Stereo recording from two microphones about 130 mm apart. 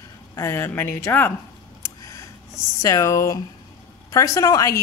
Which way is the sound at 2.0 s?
25° left (ahead or behind).